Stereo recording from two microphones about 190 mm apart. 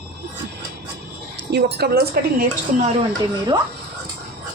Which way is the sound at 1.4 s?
60° right (ahead or behind).